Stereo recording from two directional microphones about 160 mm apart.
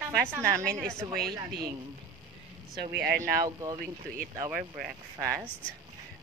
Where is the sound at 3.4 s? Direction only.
20° right (ahead or behind).